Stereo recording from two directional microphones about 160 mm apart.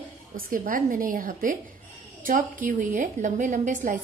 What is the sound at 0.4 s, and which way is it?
A woman's voice, 60° right (ahead or behind).